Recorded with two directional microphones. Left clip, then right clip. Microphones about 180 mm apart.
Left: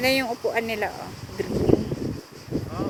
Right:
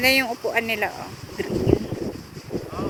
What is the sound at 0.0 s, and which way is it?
Speech, 10° left (ahead or behind).